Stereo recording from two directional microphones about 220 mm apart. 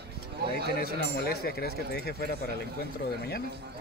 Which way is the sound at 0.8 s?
45° left (ahead or behind).